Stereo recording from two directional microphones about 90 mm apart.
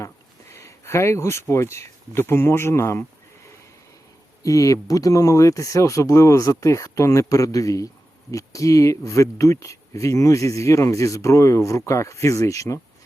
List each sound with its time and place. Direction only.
0.5 s speech: 30° left (ahead or behind)
4.4 s speech: 40° left (ahead or behind)